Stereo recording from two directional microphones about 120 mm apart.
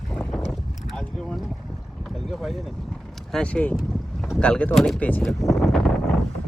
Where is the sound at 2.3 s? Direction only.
Centre (ahead or behind).